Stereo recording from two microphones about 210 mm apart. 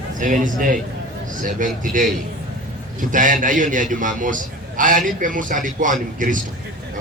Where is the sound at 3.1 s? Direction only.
40° right (ahead or behind).